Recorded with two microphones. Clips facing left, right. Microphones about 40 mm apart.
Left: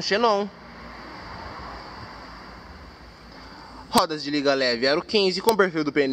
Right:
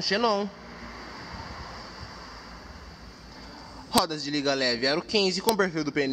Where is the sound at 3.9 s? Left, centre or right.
Centre.